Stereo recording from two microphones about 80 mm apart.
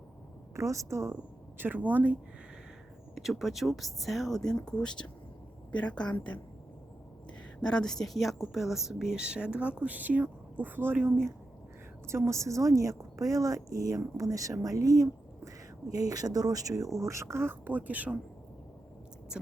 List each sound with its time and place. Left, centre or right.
0.5 s a woman's voice: right
1.5 s speech: right
3.2 s a woman's voice: centre
7.6 s speech: centre; by 11.2 s right
12.0 s speech: right
19.3 s speech: centre